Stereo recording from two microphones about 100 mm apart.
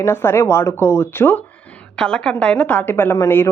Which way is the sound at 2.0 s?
10° left (ahead or behind).